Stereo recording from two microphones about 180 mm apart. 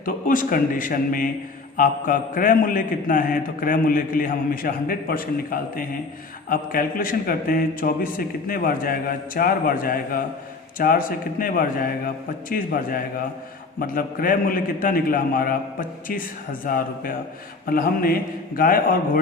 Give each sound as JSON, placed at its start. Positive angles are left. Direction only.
{"t": 0.0, "sound": "a man's voice", "side_deg": 50}